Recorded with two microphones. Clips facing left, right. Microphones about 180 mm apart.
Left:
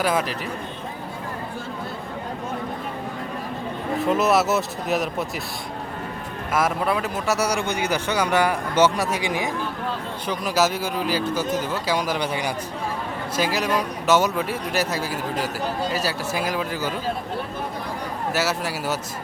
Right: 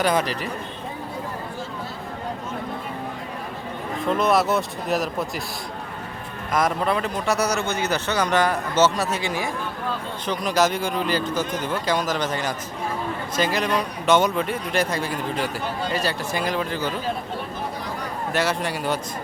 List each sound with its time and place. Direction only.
0.0 s speech: centre (ahead or behind)
4.0 s speech: 5° left (ahead or behind)
6.5 s a man's voice: 5° left (ahead or behind)
18.3 s speech: 5° left (ahead or behind)